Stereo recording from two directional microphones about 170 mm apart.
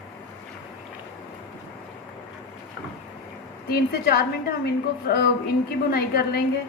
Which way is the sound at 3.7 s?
65° left (ahead or behind).